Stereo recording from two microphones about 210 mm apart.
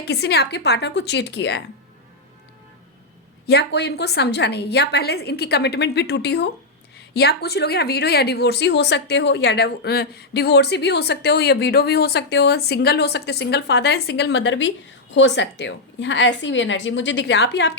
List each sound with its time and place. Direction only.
0.0 s speech: 50° left (ahead or behind)
3.4 s a woman's voice: 50° left (ahead or behind)